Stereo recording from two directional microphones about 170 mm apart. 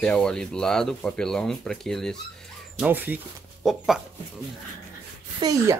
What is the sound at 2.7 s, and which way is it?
Speech, 10° right (ahead or behind).